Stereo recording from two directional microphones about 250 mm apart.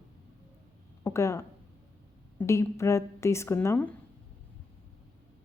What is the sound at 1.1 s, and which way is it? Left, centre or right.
A woman's voice, centre.